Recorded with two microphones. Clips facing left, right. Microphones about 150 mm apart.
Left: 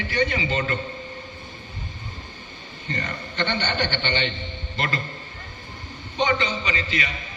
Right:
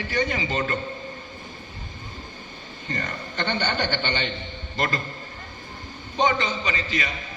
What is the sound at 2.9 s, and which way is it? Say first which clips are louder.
A man's voice: left 1 dB; 45° right (ahead or behind).